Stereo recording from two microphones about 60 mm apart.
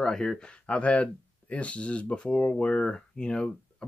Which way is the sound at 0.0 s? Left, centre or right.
Centre.